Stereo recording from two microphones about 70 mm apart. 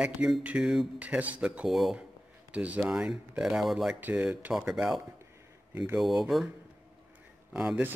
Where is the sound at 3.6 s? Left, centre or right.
Centre.